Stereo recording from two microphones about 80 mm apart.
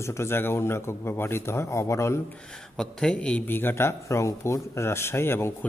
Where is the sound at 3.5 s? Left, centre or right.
Left.